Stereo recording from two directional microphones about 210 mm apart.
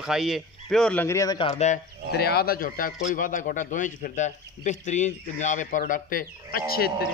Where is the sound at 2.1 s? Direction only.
50° left (ahead or behind).